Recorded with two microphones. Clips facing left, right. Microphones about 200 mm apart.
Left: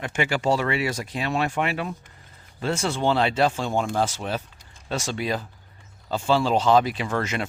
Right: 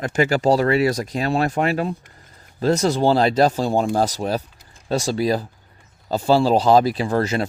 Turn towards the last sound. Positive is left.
turn(degrees=-35)  # may be behind; listen again after turning